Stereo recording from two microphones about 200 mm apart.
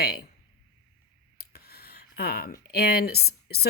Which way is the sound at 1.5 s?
50° left (ahead or behind).